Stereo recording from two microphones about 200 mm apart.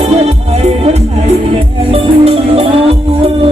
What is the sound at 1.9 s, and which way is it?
Music, 30° right (ahead or behind).